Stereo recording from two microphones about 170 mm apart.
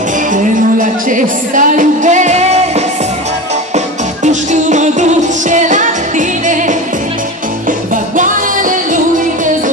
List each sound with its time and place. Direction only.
0.3 s music: 50° right (ahead or behind)
7.9 s music: 50° right (ahead or behind)